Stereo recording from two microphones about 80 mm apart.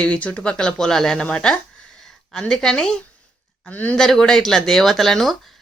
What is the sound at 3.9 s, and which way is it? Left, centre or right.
Speech, centre.